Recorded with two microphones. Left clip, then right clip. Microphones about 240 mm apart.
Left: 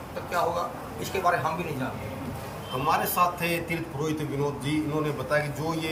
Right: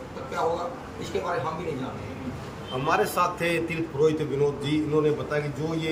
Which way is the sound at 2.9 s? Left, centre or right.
Centre.